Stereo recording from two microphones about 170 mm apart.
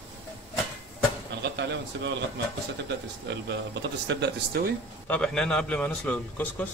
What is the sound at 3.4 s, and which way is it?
Speech, 90° right.